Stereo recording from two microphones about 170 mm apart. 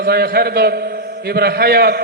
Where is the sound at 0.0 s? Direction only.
65° right (ahead or behind).